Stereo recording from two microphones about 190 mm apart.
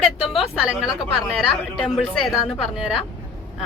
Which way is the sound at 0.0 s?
Centre (ahead or behind).